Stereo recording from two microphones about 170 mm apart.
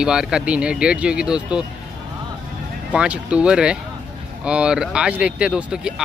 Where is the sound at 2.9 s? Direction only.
5° right (ahead or behind).